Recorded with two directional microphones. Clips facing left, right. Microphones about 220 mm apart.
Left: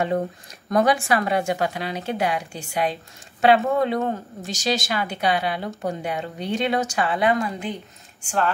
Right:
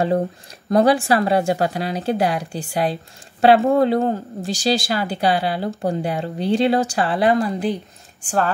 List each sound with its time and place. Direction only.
0.7 s speech: 30° right (ahead or behind)